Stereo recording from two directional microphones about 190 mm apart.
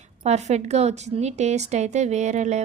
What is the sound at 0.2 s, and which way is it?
A woman's voice, 35° right (ahead or behind).